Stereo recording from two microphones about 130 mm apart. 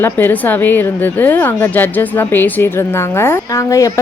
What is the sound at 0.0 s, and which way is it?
A woman's voice, 15° left (ahead or behind).